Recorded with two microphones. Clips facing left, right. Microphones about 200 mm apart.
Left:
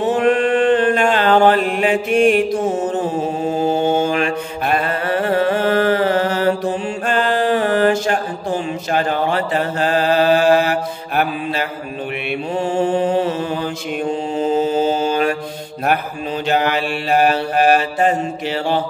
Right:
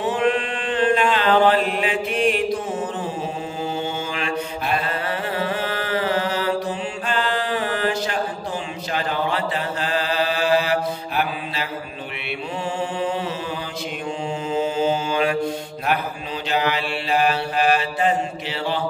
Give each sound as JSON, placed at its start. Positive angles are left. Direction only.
{"t": 0.1, "sound": "chant", "side_deg": 45}
{"t": 3.5, "sound": "mantra", "side_deg": 45}
{"t": 12.7, "sound": "mantra", "side_deg": 40}
{"t": 14.4, "sound": "mantra", "side_deg": 40}
{"t": 16.4, "sound": "mantra", "side_deg": 50}